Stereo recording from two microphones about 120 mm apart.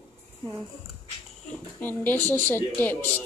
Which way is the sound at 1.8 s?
15° left (ahead or behind).